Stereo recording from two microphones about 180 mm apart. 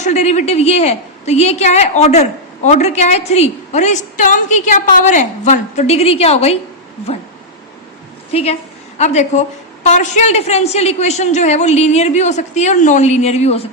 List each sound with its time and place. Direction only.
0.0 s a woman's voice: 40° left (ahead or behind)
8.3 s a woman's voice: 35° left (ahead or behind)